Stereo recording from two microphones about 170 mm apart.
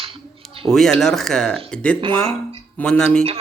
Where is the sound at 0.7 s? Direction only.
Centre (ahead or behind).